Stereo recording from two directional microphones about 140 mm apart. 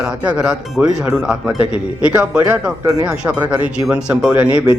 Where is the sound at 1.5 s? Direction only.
40° left (ahead or behind).